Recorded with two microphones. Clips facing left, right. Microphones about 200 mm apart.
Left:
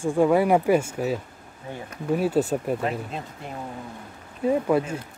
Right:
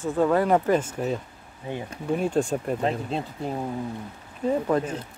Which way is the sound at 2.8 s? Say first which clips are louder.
Right 2 dB; 30° right (ahead or behind).